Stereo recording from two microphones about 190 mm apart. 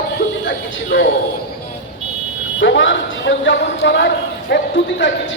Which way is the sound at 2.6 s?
75° left (ahead or behind).